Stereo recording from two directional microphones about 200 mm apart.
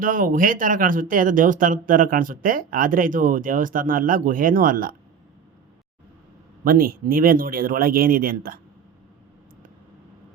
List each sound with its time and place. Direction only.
0.0 s speech: 40° right (ahead or behind)
6.7 s speech: 45° right (ahead or behind)